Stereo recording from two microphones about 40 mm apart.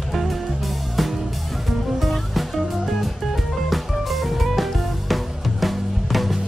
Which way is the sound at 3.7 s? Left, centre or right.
Centre.